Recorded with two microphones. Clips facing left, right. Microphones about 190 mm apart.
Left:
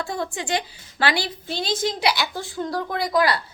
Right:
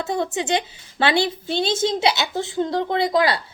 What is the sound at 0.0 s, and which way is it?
A woman's voice, 20° right (ahead or behind).